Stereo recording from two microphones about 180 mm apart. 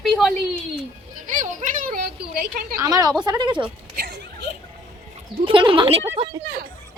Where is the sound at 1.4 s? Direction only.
45° right (ahead or behind).